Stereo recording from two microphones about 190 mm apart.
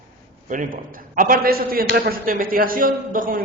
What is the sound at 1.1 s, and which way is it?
A man's voice, 45° right (ahead or behind).